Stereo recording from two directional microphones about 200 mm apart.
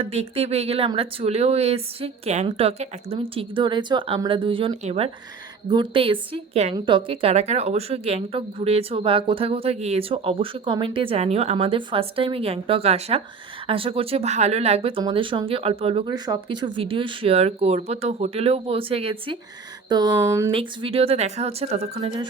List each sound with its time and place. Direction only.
0.0 s speech: 30° right (ahead or behind)
19.9 s a sound: 20° right (ahead or behind)
20.5 s speech: 25° right (ahead or behind)